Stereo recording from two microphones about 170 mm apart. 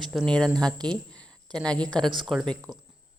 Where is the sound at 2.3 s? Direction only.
Centre (ahead or behind).